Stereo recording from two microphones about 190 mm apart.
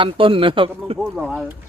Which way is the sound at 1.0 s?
Centre (ahead or behind).